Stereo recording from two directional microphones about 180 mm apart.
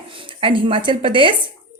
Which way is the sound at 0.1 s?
30° right (ahead or behind).